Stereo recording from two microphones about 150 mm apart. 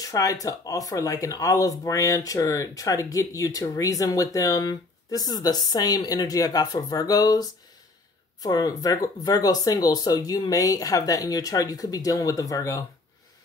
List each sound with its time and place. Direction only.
0.0 s speech: 20° left (ahead or behind)